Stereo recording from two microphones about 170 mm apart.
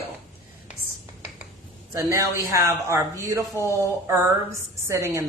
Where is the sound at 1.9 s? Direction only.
20° right (ahead or behind).